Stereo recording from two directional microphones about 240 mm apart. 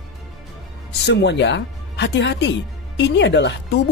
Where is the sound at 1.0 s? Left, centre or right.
Left.